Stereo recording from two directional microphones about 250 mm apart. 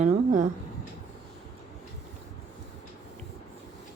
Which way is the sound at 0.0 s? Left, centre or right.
Right.